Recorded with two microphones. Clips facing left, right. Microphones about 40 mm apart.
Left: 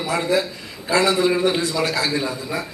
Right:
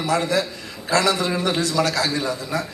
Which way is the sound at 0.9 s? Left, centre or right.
Left.